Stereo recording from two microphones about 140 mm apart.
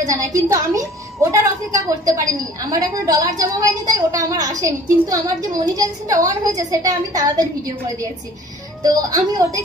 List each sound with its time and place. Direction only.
0.0 s a woman's voice: 25° right (ahead or behind)